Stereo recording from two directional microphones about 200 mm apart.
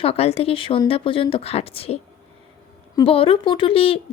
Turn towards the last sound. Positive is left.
turn(degrees=30)  # may be behind; listen again after turning